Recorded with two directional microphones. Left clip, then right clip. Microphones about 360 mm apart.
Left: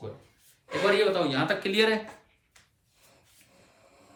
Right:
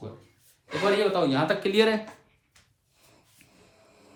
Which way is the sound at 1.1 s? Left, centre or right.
Centre.